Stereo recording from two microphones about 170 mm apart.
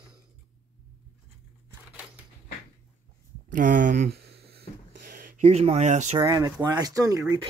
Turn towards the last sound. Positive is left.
turn(degrees=-20)  # may be behind; listen again after turning